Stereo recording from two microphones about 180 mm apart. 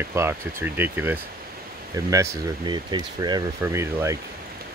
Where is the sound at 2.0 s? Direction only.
20° right (ahead or behind).